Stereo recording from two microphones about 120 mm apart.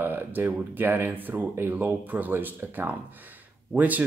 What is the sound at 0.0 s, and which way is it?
Speech, 15° right (ahead or behind).